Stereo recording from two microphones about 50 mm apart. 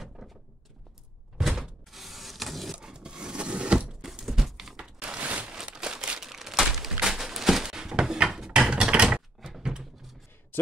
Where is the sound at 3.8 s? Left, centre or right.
Centre.